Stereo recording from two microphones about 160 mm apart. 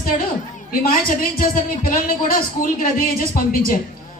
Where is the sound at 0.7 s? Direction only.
65° left (ahead or behind).